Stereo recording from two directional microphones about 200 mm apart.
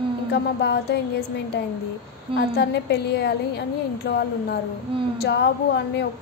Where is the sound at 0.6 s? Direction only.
55° left (ahead or behind).